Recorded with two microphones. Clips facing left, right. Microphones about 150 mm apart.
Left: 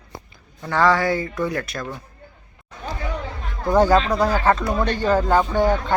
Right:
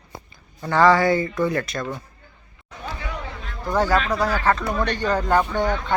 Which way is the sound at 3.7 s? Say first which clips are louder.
Left 4 dB; 15° left (ahead or behind).